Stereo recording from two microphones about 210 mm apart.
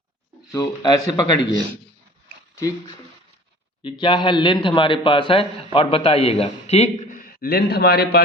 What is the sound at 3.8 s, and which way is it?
A man's voice, 20° left (ahead or behind).